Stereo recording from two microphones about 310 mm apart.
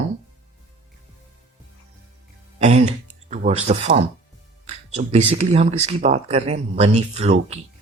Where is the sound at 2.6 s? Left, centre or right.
Right.